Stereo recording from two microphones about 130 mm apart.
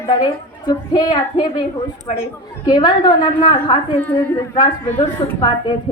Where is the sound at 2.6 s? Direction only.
35° left (ahead or behind).